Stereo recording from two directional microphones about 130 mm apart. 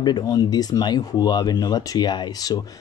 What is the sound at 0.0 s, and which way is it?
Speech, 30° left (ahead or behind).